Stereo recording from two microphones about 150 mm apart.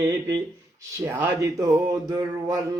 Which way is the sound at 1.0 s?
15° right (ahead or behind).